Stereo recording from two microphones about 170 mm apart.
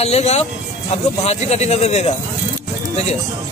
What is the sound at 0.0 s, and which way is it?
Speech, 40° left (ahead or behind).